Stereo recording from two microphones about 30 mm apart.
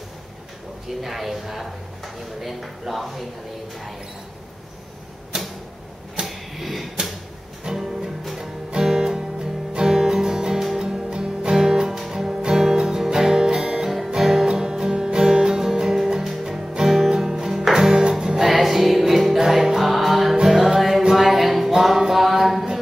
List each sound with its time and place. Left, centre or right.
0.8 s speech: centre
5.3 s a sound: right
6.2 s a sound: centre
7.6 s music: centre
13.8 s music: centre
18.5 s music: centre
19.4 s music: centre
19.8 s music: centre
21.2 s a sound: centre
22.1 s mantra: centre